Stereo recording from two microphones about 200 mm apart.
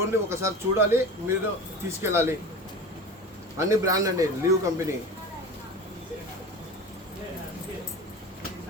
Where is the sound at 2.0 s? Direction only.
10° right (ahead or behind).